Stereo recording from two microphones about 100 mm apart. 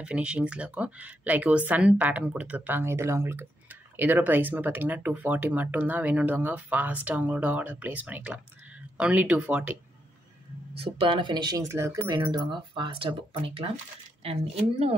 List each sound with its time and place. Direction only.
0.0 s speech: 10° right (ahead or behind)
2.8 s speech: 25° right (ahead or behind)
10.7 s speech: 65° right (ahead or behind); by 11.5 s 50° right (ahead or behind)
11.5 s speech: 30° right (ahead or behind)
12.1 s speech: 50° right (ahead or behind)
14.2 s speech: 85° right